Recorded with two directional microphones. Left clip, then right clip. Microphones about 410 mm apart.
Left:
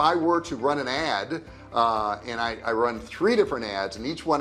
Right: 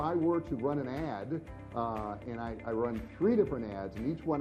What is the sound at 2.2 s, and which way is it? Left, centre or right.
Speech, centre.